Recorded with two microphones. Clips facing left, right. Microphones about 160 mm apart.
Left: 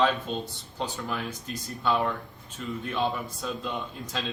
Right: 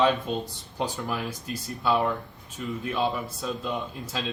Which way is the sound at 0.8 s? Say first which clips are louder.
Right 2 dB; 10° right (ahead or behind).